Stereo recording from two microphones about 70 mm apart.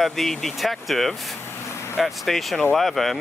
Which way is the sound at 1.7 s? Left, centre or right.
Left.